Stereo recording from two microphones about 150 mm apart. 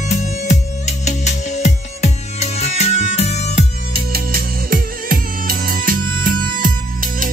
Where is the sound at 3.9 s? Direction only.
80° right.